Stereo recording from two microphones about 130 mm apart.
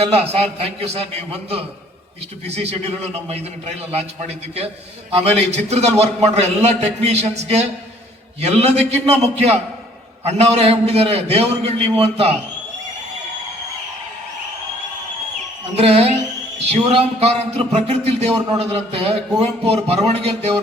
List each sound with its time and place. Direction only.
0.1 s a man's voice: 50° right (ahead or behind)
15.7 s a man's voice: 50° right (ahead or behind)